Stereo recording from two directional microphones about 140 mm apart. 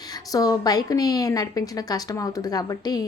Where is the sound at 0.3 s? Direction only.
25° left (ahead or behind).